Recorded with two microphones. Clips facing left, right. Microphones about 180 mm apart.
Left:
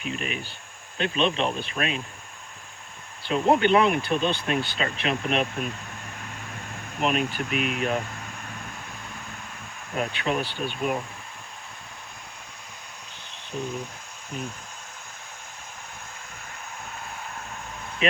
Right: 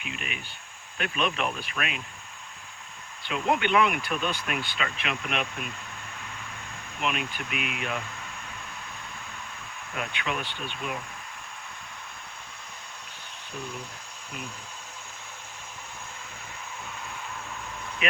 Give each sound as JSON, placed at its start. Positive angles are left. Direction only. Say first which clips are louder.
{"t": 0.0, "sound": "speech", "louder": "left 7 dB", "side_deg": 35}
{"t": 3.2, "sound": "speech", "louder": "left 6 dB", "side_deg": 35}
{"t": 7.0, "sound": "speech", "louder": "left 6 dB", "side_deg": 40}
{"t": 9.9, "sound": "speech", "louder": "left 6 dB", "side_deg": 35}
{"t": 18.0, "sound": "speech", "louder": "left 5 dB", "side_deg": 30}